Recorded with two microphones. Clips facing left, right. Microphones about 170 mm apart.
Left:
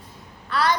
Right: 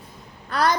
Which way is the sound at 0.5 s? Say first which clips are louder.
Right 1 dB; 45° right (ahead or behind).